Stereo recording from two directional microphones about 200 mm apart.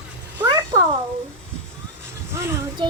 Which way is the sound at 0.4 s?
25° right (ahead or behind).